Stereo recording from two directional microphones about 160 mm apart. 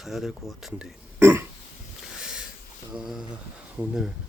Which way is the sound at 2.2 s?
5° right (ahead or behind).